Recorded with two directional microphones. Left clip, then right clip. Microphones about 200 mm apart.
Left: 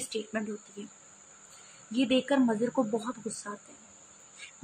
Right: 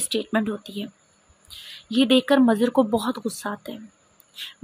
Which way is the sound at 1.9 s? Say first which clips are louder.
Right 9 dB; 35° right (ahead or behind).